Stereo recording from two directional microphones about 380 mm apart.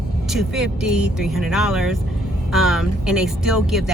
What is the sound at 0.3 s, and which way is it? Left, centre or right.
A woman's voice, centre.